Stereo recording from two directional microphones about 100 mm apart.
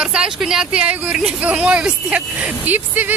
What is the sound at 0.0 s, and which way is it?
Speech, 10° right (ahead or behind).